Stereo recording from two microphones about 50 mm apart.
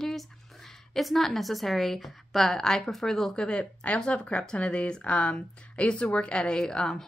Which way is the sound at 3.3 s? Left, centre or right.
Centre.